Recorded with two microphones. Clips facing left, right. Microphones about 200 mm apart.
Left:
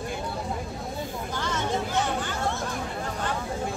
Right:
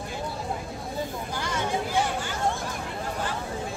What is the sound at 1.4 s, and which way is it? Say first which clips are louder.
Vehicle: even; 10° right (ahead or behind).